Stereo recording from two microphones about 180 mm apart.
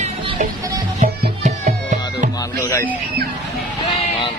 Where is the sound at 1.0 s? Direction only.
40° right (ahead or behind).